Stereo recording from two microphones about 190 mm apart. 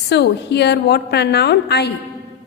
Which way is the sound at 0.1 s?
65° left (ahead or behind).